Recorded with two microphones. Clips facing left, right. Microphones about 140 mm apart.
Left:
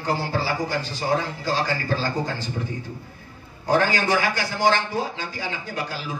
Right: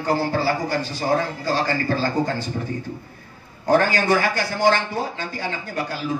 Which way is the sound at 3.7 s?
50° right (ahead or behind).